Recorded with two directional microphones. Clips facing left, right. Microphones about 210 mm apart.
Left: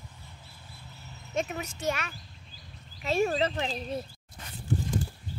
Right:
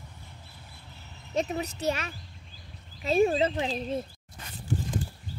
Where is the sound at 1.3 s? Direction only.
35° right (ahead or behind).